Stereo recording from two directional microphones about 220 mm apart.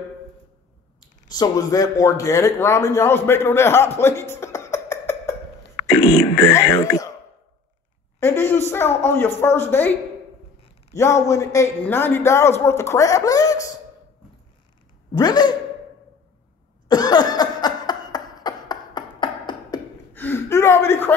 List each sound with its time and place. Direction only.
1.3 s a man's voice: 20° left (ahead or behind)
4.0 s a sound: 10° left (ahead or behind)
6.5 s a man's voice: 10° left (ahead or behind)
8.2 s a man's voice: 10° left (ahead or behind)
15.1 s speech: 20° left (ahead or behind)
16.8 s a sound: 20° left (ahead or behind)
20.2 s gasp: 10° left (ahead or behind)